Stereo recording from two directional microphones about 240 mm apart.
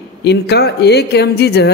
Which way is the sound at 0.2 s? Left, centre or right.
Left.